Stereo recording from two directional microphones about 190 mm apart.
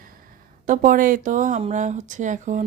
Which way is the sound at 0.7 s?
45° right (ahead or behind).